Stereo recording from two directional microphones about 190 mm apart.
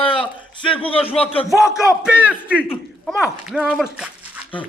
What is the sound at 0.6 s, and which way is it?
Speech, 25° left (ahead or behind).